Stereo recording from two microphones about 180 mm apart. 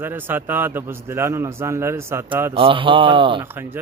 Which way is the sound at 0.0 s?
10° right (ahead or behind).